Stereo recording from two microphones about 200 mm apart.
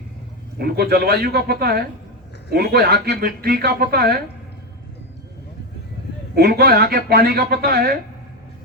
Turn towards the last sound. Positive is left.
turn(degrees=-50)  # may be behind; listen again after turning